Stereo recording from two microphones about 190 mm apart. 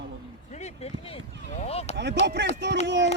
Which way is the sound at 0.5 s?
35° left (ahead or behind).